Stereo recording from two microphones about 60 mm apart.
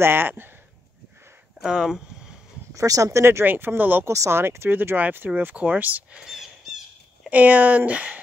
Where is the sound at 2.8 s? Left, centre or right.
Right.